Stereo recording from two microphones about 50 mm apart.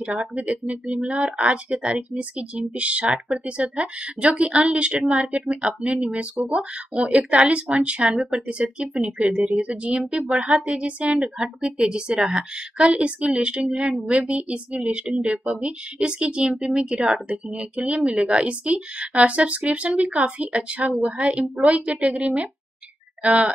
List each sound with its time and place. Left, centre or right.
0.7 s speech: right